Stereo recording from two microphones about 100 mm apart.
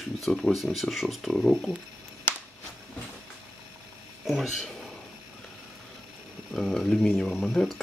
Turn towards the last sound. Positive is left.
turn(degrees=5)  # may be behind; listen again after turning